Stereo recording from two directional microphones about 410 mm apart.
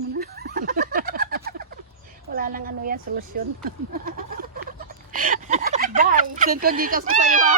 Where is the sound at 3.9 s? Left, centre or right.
Right.